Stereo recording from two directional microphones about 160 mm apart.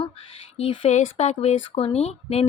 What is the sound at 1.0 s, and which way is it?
Speech, 45° left (ahead or behind).